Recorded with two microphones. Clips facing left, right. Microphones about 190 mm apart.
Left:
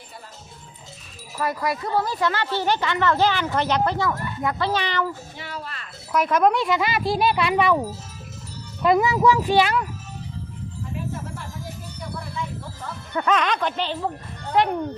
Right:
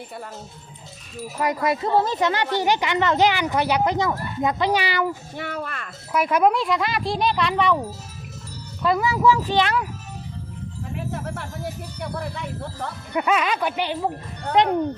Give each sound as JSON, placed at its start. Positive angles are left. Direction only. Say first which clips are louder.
{"t": 1.4, "sound": "speech", "louder": "right 3 dB", "side_deg": -20}
{"t": 5.4, "sound": "speech", "louder": "right 5 dB", "side_deg": -55}
{"t": 6.1, "sound": "speech", "louder": "even", "side_deg": -10}
{"t": 8.8, "sound": "a child's voice", "louder": "left 2 dB", "side_deg": 20}
{"t": 11.1, "sound": "a sound", "louder": "right 3 dB", "side_deg": -65}
{"t": 12.8, "sound": "speech", "louder": "right 4 dB", "side_deg": -65}
{"t": 13.1, "sound": "speech", "louder": "even", "side_deg": -10}